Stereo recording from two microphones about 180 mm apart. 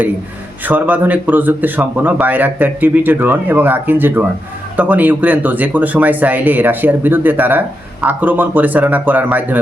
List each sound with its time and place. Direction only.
0.6 s speech: 10° right (ahead or behind)